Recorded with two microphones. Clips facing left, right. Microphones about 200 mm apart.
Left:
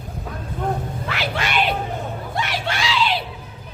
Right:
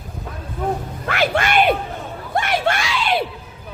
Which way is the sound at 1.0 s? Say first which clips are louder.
Right 8 dB; 55° right (ahead or behind).